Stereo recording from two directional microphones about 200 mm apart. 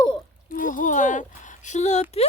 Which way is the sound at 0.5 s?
40° left (ahead or behind).